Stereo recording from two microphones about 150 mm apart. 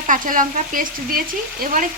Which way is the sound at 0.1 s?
60° right (ahead or behind).